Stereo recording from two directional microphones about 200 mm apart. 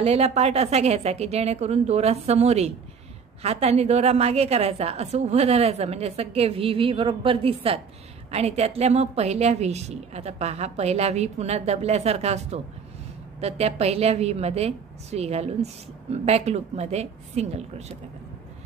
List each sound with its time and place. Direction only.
0.0 s a woman's voice: 30° right (ahead or behind)